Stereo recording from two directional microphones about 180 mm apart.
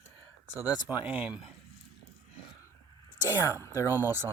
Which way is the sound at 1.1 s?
10° right (ahead or behind).